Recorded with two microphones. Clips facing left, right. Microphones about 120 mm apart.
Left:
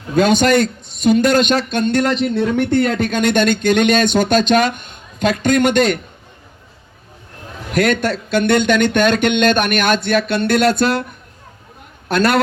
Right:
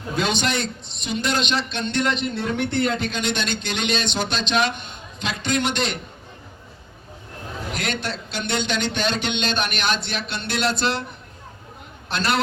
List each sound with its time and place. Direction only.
0.2 s speech: 45° left (ahead or behind)
7.7 s speech: 50° left (ahead or behind)
12.0 s speech: 50° left (ahead or behind)